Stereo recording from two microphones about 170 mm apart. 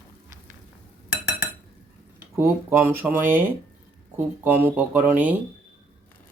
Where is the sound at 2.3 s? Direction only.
15° right (ahead or behind).